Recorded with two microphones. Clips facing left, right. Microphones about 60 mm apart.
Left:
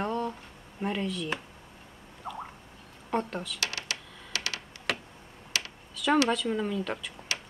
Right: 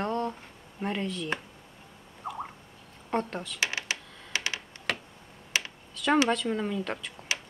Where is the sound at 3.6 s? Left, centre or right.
Right.